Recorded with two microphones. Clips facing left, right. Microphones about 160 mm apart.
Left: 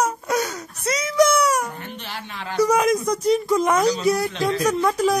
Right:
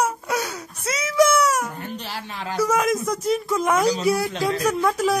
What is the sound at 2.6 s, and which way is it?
A man's voice, centre (ahead or behind).